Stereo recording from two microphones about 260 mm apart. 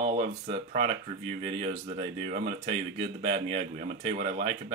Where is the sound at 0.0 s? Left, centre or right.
Right.